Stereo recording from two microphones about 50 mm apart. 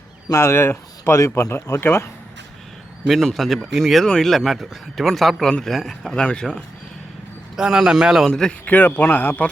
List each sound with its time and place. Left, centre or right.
0.3 s speech: left
1.5 s speech: left
3.1 s speech: centre
4.0 s speech: centre
6.1 s speech: centre
7.5 s a man's voice: centre
8.3 s speech: centre
8.6 s a man's voice: left